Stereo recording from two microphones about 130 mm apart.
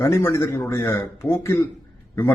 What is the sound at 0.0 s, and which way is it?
A man's voice, 20° left (ahead or behind).